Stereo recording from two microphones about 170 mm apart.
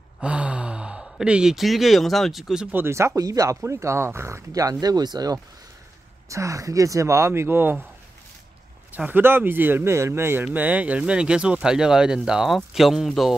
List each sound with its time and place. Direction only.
0.2 s speech: 5° right (ahead or behind)
8.9 s speech: 10° right (ahead or behind)